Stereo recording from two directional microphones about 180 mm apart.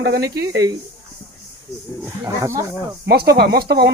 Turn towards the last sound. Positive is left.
turn(degrees=-60)  # may be behind; listen again after turning